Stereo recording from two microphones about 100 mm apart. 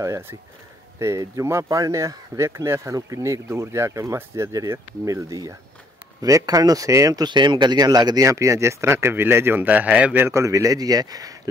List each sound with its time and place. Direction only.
0.0 s speech: 25° right (ahead or behind)